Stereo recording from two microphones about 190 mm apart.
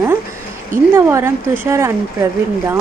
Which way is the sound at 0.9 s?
15° right (ahead or behind).